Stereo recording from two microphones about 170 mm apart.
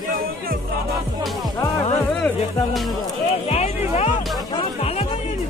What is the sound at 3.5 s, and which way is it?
Music, 40° left (ahead or behind).